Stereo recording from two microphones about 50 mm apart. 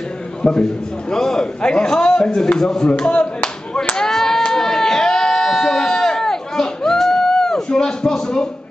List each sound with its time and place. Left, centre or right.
0.4 s a man's voice: centre
2.9 s clapping: left
3.9 s clapping: centre
4.5 s a sound: centre